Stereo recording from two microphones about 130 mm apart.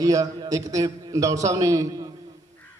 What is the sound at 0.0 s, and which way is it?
A man's voice, 25° right (ahead or behind).